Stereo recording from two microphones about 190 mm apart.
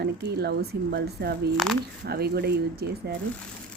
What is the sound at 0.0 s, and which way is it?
A woman's voice, 60° right (ahead or behind).